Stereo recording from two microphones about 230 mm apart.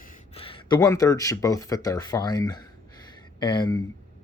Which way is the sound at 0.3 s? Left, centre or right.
Left.